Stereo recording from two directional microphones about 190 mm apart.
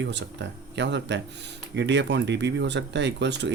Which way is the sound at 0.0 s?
65° right (ahead or behind).